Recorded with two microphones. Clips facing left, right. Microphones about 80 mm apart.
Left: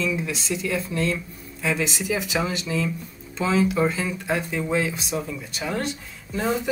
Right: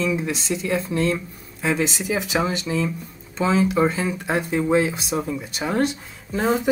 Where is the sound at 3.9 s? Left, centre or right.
Right.